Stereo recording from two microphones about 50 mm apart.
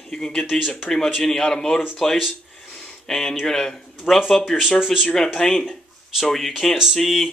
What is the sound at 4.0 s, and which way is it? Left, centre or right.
A man's voice, centre.